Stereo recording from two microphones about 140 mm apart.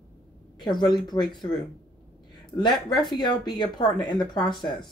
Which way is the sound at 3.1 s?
30° left (ahead or behind).